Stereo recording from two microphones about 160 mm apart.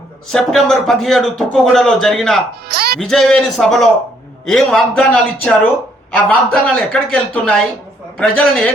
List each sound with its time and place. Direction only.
0.3 s speech: centre (ahead or behind)
2.6 s speech: 80° right
3.0 s a man's voice: centre (ahead or behind)